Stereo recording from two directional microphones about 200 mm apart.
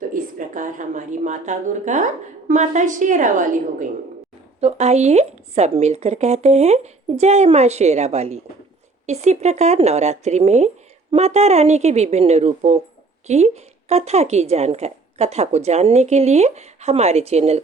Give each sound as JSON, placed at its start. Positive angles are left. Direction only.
{"t": 0.1, "sound": "a woman's voice", "side_deg": -40}